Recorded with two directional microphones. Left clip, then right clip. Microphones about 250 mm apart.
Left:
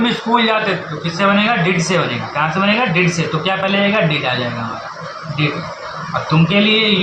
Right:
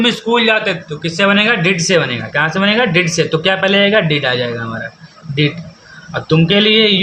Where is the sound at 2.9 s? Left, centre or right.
Right.